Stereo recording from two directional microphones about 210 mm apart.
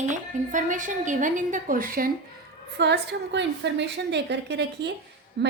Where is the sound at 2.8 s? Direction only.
55° right (ahead or behind).